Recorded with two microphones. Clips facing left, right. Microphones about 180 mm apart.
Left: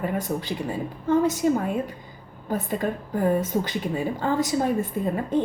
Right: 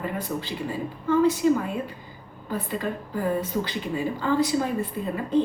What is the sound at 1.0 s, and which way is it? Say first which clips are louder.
Speech: even; 45° left (ahead or behind).